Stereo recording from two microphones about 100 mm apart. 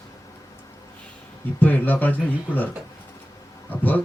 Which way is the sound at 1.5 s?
15° left (ahead or behind).